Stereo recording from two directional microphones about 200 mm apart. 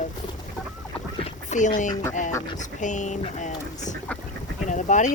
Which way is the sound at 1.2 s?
35° left (ahead or behind).